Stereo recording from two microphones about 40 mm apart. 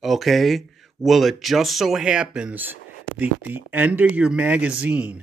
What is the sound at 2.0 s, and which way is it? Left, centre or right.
Speech, right.